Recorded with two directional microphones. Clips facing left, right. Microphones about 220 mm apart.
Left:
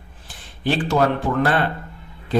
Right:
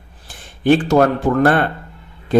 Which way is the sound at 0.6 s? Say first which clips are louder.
Right 6 dB; 50° right (ahead or behind).